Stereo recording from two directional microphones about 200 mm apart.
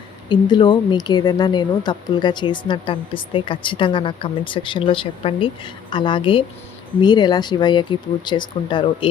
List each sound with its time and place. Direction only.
0.3 s speech: 25° left (ahead or behind)